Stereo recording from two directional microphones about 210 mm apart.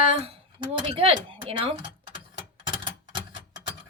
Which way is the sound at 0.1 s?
30° right (ahead or behind).